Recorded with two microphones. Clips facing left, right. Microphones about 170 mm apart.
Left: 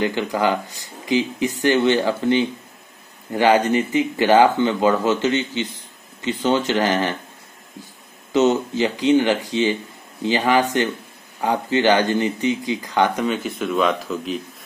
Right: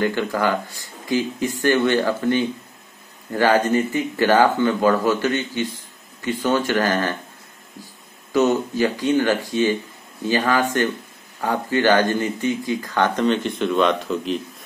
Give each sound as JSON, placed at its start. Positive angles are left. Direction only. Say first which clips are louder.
{"t": 0.0, "sound": "speech", "louder": "even", "side_deg": 15}
{"t": 8.3, "sound": "speech", "louder": "left 1 dB", "side_deg": 20}